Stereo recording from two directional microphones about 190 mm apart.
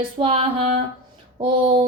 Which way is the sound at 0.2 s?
30° right (ahead or behind).